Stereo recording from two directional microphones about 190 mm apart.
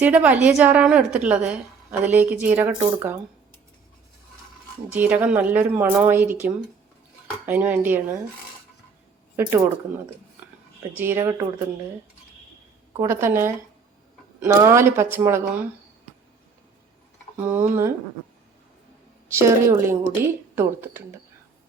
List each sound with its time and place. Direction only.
0.0 s a woman's voice: 5° right (ahead or behind)
4.9 s a woman's voice: 10° right (ahead or behind)
9.3 s speech: 15° right (ahead or behind)
10.9 s a woman's voice: 10° right (ahead or behind)
13.0 s a woman's voice: 15° right (ahead or behind)
17.4 s a woman's voice: 10° right (ahead or behind)
19.3 s a woman's voice: 15° right (ahead or behind)